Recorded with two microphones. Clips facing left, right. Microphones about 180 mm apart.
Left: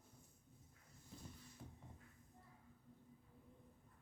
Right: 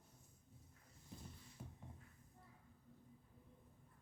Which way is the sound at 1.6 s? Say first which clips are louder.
Right 2 dB; 10° right (ahead or behind).